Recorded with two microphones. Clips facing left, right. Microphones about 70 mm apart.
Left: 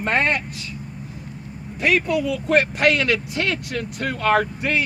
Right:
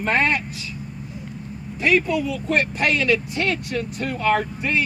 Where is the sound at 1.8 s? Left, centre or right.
Left.